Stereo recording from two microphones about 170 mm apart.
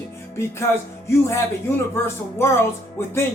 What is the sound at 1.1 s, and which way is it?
Music, 15° left (ahead or behind).